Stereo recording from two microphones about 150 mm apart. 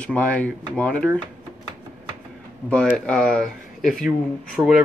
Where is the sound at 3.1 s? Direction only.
5° left (ahead or behind).